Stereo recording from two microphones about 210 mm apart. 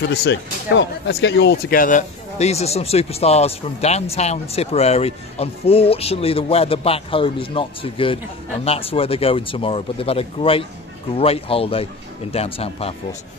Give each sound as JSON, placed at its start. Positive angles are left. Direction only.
{"t": 0.1, "sound": "speech", "side_deg": 55}